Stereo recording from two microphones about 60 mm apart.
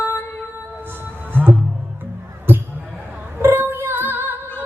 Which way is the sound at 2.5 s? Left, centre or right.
Right.